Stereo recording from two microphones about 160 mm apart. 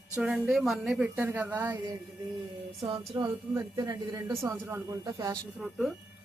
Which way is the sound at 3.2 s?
15° right (ahead or behind).